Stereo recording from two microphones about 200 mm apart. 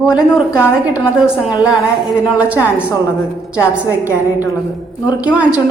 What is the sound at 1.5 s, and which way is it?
Speech, 20° left (ahead or behind).